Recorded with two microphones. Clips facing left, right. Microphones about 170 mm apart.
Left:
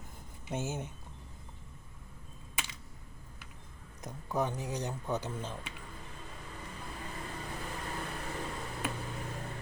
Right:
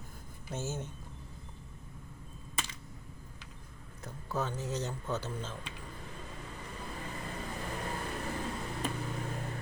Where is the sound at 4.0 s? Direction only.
15° left (ahead or behind).